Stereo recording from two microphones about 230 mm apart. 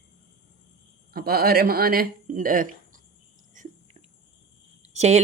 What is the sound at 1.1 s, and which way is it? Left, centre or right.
A woman's voice, right.